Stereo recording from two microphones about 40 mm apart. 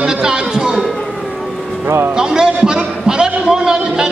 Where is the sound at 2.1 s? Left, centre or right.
Centre.